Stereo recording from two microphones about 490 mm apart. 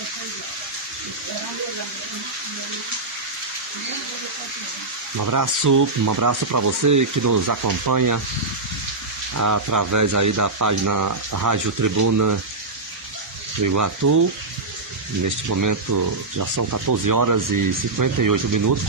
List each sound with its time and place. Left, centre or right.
5.2 s speech: right
9.4 s speech: right
13.6 s speech: right
15.2 s speech: right